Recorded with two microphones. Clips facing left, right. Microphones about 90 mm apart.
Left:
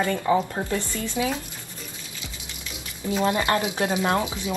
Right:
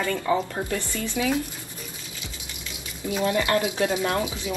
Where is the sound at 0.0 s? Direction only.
25° left (ahead or behind).